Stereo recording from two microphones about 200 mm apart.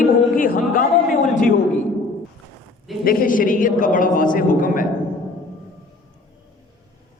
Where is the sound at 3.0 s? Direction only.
45° left (ahead or behind).